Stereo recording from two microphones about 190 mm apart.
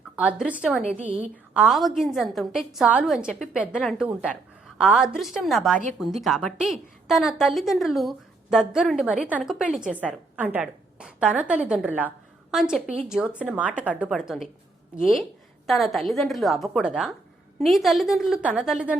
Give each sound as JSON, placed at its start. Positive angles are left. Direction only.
{"t": 0.2, "sound": "a woman's voice", "side_deg": -5}
{"t": 0.9, "sound": "a woman's voice", "side_deg": -35}
{"t": 1.2, "sound": "a woman's voice", "side_deg": -5}